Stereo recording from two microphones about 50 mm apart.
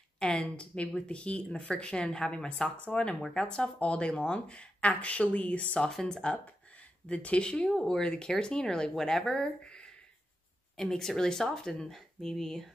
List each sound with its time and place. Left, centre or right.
0.2 s speech: left
5.9 s speech: centre
7.1 s speech: left
9.4 s speech: left
10.8 s speech: centre